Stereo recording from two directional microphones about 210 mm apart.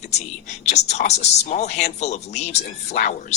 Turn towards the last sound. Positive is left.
turn(degrees=35)  # may be behind; listen again after turning